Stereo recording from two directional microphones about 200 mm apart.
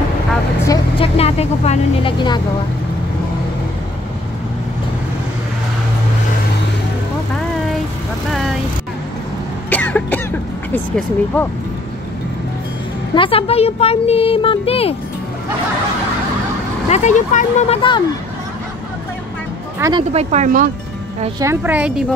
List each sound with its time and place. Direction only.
0.7 s speech: 25° left (ahead or behind)
8.3 s vehicle: centre (ahead or behind)
9.7 s cough: 10° left (ahead or behind)
10.7 s speech: 10° left (ahead or behind)
13.1 s speech: 25° left (ahead or behind)
16.9 s speech: 35° left (ahead or behind)
19.8 s speech: 25° right (ahead or behind); by 20.7 s 40° right (ahead or behind)
21.4 s a woman's voice: 10° right (ahead or behind)